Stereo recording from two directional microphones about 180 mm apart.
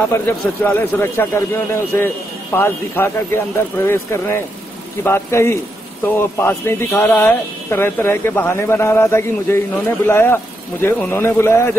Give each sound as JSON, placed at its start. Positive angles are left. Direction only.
{"t": 0.7, "sound": "speech", "side_deg": 10}